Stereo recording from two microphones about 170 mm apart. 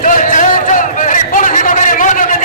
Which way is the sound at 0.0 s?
50° left (ahead or behind).